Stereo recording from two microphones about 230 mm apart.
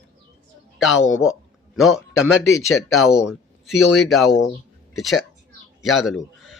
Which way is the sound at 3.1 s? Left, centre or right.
Centre.